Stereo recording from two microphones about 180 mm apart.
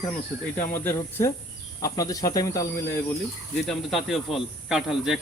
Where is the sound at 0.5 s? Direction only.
10° left (ahead or behind).